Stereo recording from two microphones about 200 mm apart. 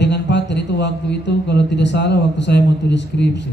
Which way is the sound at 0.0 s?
60° left (ahead or behind).